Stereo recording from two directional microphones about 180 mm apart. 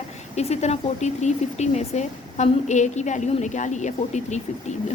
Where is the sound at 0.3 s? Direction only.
35° left (ahead or behind).